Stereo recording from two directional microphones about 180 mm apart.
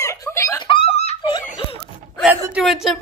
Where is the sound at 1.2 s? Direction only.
25° left (ahead or behind).